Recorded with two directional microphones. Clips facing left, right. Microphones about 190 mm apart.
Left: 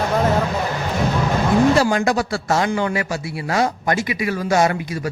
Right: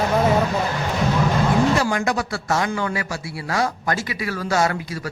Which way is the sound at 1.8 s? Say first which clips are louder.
Left 4 dB; 30° left (ahead or behind).